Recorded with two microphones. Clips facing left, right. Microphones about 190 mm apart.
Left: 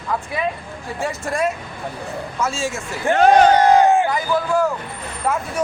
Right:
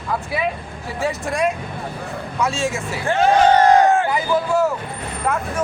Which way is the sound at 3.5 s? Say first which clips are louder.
Even; 15° left (ahead or behind).